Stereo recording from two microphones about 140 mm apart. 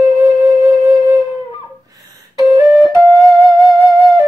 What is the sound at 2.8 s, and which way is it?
Flute, centre (ahead or behind).